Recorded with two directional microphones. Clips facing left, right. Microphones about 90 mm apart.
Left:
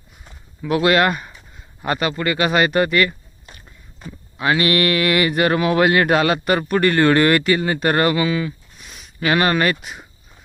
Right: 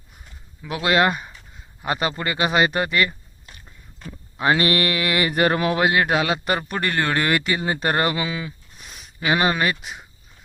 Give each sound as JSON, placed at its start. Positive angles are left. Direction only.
{"t": 0.6, "sound": "speech", "side_deg": -15}
{"t": 4.4, "sound": "mantra", "side_deg": -30}
{"t": 5.3, "sound": "a sound", "side_deg": -35}
{"t": 5.7, "sound": "speech", "side_deg": -15}